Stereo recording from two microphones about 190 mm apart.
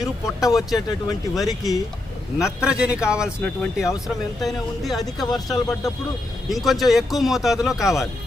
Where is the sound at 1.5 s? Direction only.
20° left (ahead or behind).